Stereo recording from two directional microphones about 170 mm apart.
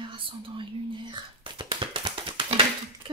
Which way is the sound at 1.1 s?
30° right (ahead or behind).